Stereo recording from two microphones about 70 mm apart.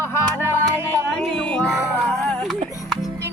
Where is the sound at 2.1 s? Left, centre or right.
Centre.